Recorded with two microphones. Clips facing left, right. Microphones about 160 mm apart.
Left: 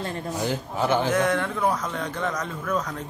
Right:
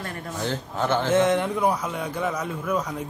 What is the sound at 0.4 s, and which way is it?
Speech, 10° left (ahead or behind).